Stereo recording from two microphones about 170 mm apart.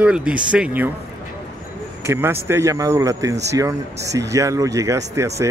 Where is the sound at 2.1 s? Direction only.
15° right (ahead or behind).